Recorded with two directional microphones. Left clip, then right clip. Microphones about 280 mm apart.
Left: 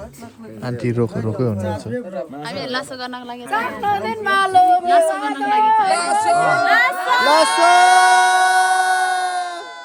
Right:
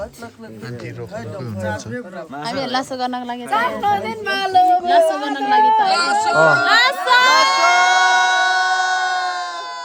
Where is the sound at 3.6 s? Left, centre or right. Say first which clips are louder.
Right 2 dB; centre.